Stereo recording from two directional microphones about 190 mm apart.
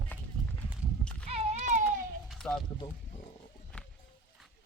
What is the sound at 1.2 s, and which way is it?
Baby cry, 35° right (ahead or behind).